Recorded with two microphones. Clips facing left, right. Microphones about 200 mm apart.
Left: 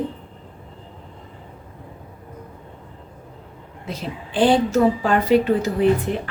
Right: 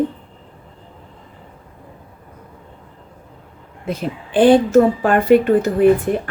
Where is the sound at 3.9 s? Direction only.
55° right (ahead or behind).